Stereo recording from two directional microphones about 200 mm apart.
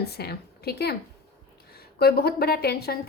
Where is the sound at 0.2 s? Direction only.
50° left (ahead or behind).